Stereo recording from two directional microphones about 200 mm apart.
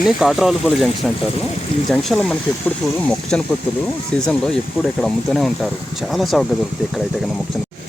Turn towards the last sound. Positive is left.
turn(degrees=0)  # may be behind; listen again after turning